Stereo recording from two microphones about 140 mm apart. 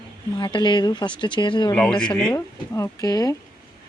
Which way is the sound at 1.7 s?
5° left (ahead or behind).